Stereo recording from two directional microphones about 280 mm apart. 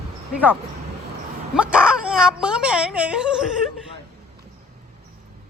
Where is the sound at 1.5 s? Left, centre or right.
Centre.